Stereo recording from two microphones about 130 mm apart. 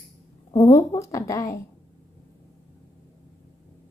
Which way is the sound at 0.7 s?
20° left (ahead or behind).